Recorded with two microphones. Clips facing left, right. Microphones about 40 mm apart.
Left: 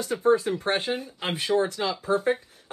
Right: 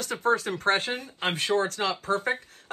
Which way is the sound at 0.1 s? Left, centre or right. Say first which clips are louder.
Left 3 dB; centre.